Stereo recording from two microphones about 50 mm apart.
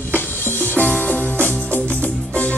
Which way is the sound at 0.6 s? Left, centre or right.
Left.